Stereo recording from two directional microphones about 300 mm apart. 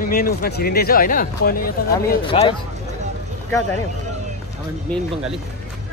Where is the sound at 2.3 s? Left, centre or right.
Centre.